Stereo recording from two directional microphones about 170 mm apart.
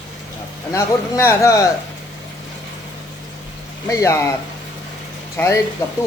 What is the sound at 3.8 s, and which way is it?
Speech, 15° left (ahead or behind).